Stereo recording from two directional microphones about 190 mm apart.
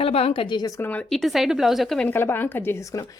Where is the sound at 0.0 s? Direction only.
30° left (ahead or behind).